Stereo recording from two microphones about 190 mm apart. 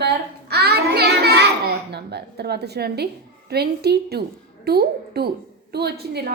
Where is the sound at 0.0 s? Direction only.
60° right (ahead or behind).